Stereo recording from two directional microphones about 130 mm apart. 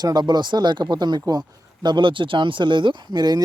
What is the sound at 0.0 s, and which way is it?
Speech, 30° right (ahead or behind).